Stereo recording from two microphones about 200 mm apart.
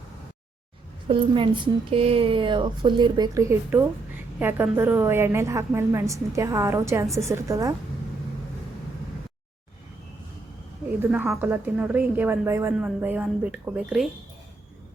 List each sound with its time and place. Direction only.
1.0 s a woman's voice: 25° right (ahead or behind)
11.0 s a woman's voice: 10° right (ahead or behind)